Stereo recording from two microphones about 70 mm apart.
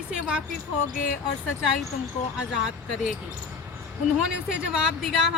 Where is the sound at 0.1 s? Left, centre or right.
Centre.